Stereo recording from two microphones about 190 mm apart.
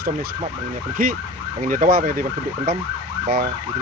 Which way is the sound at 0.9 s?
45° right (ahead or behind).